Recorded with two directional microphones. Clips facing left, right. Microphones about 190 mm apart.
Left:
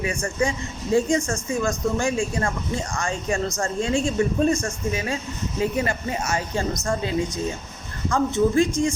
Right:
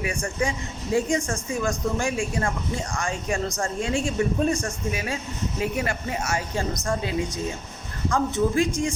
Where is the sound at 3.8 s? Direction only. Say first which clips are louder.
Left 4 dB; 30° left (ahead or behind).